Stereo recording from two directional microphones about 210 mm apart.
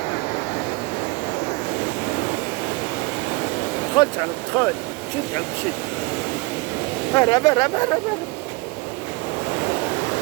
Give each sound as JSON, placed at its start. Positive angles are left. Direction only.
{"t": 3.9, "sound": "speech", "side_deg": 15}
{"t": 7.1, "sound": "speech", "side_deg": 15}